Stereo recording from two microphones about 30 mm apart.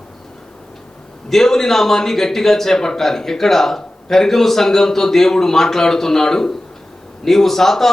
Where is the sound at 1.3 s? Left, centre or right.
Centre.